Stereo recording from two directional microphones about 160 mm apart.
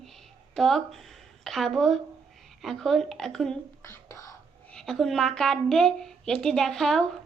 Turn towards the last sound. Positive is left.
turn(degrees=5)  # may be behind; listen again after turning